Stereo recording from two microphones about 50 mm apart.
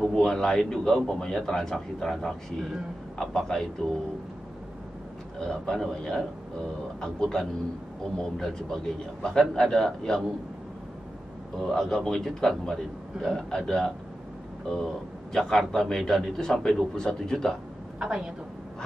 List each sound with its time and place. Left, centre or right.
0.1 s a man's voice: centre
5.4 s a man's voice: centre
11.5 s a man's voice: centre
15.3 s a man's voice: centre
17.9 s a woman's voice: centre